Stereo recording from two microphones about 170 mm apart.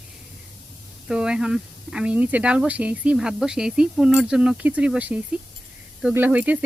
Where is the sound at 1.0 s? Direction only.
5° right (ahead or behind).